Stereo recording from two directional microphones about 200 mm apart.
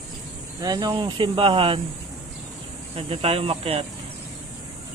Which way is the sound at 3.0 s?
30° right (ahead or behind).